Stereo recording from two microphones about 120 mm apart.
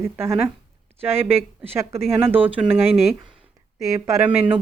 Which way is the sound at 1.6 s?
20° right (ahead or behind).